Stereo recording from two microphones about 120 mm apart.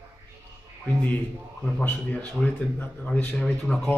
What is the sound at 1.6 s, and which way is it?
A man's voice, 5° left (ahead or behind).